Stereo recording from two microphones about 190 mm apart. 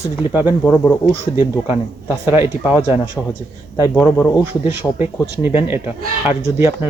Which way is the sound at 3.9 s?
5° right (ahead or behind).